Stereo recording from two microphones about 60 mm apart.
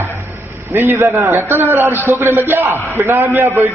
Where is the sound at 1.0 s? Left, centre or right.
Right.